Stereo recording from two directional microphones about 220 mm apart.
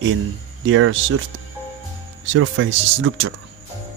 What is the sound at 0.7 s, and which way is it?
Speech, 65° right (ahead or behind).